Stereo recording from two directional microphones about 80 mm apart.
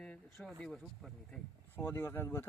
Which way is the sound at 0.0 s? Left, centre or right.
Centre.